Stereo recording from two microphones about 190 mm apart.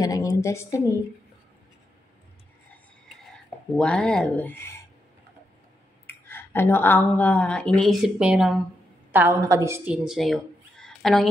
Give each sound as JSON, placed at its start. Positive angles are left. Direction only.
{"t": 0.0, "sound": "a woman's voice", "side_deg": 20}
{"t": 3.7, "sound": "speech", "side_deg": 5}
{"t": 6.0, "sound": "a woman's voice", "side_deg": 10}
{"t": 10.0, "sound": "a sound", "side_deg": 0}